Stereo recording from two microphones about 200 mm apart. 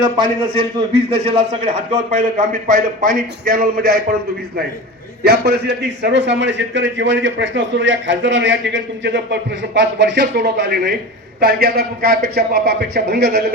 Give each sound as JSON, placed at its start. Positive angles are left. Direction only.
{"t": 0.0, "sound": "a man's voice", "side_deg": -25}
{"t": 5.2, "sound": "a man's voice", "side_deg": -55}